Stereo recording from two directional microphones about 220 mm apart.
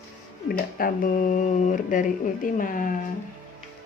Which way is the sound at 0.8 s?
40° left (ahead or behind).